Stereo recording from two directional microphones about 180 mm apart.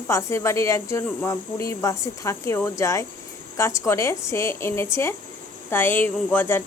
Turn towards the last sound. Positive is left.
turn(degrees=10)  # may be behind; listen again after turning